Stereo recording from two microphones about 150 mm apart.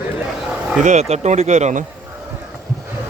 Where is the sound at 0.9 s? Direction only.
45° right (ahead or behind).